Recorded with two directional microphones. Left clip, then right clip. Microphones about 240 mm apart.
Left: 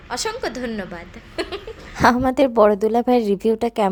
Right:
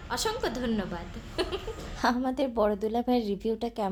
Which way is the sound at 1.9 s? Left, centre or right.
Left.